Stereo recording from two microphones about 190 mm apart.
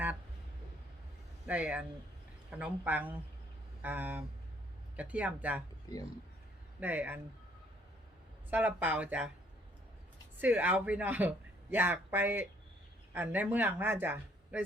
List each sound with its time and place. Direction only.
1.5 s speech: 5° right (ahead or behind)
5.9 s speech: 20° left (ahead or behind)
6.7 s speech: 10° right (ahead or behind)
8.4 s speech: 10° right (ahead or behind)
10.4 s speech: 10° right (ahead or behind)